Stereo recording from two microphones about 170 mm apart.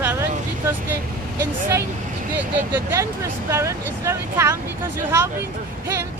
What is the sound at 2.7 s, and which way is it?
Speech, 15° right (ahead or behind).